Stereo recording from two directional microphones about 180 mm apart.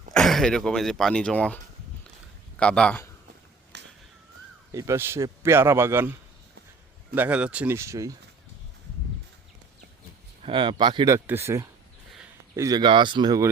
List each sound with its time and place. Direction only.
0.1 s speech: centre (ahead or behind)
2.6 s a man's voice: 5° left (ahead or behind)
3.7 s a sound: 75° right (ahead or behind)
4.7 s speech: 15° right (ahead or behind)
10.4 s speech: 25° right (ahead or behind)